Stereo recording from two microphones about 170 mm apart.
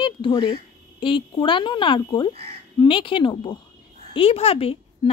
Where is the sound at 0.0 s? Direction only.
30° left (ahead or behind).